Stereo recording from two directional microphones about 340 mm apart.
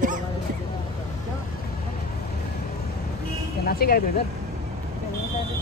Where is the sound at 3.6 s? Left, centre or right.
Left.